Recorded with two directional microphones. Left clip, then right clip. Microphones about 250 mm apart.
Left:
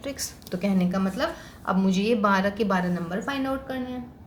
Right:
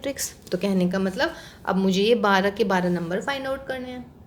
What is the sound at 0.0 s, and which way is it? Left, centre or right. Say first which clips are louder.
Speech: right 4 dB; right.